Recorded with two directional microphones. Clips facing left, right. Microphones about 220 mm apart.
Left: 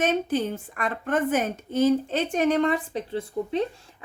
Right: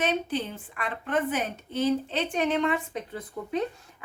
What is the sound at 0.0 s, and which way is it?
A woman's voice, 45° left (ahead or behind).